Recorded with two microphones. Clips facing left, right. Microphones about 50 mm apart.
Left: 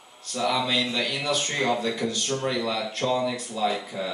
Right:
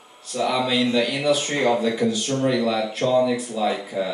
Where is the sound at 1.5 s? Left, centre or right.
Centre.